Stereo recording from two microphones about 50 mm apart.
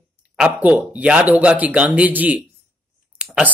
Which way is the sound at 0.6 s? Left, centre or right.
Right.